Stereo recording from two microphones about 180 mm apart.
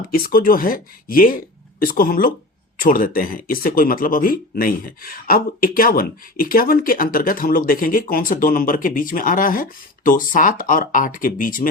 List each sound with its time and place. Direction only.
0.1 s speech: 55° left (ahead or behind)